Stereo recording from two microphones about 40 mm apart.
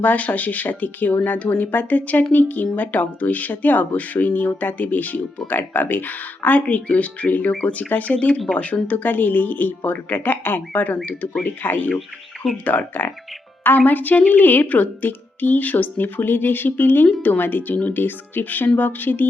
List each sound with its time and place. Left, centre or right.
0.0 s a woman's voice: left
9.1 s a woman's voice: left
11.4 s a woman's voice: left